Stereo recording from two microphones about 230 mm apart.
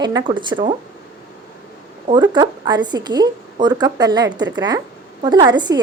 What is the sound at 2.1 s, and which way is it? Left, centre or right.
A woman's voice, centre.